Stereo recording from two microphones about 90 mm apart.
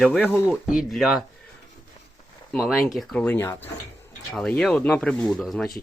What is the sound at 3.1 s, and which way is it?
Speech, 15° left (ahead or behind).